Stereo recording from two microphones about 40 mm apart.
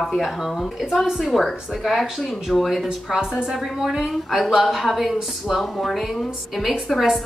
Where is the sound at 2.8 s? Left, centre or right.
Centre.